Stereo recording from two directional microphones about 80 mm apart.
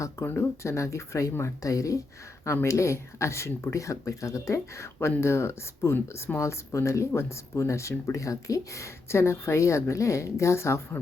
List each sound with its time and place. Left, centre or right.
0.0 s speech: left